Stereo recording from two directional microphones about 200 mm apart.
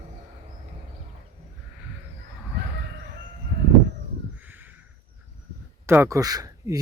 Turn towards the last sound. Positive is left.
turn(degrees=-20)  # may be behind; listen again after turning